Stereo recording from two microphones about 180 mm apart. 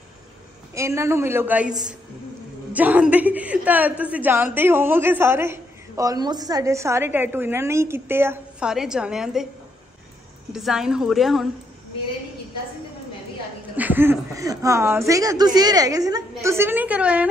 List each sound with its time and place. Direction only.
0.7 s a woman's voice: 15° right (ahead or behind)
10.5 s a woman's voice: 5° right (ahead or behind)
13.7 s a woman's voice: 10° right (ahead or behind)